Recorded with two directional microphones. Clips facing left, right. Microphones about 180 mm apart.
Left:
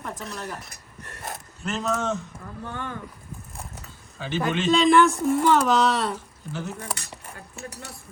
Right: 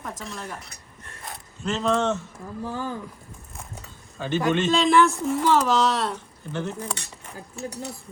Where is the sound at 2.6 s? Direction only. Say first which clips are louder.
Right 4 dB; 30° right (ahead or behind).